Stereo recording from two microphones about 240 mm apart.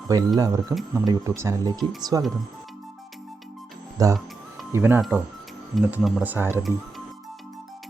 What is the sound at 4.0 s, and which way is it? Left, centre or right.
Speech, centre.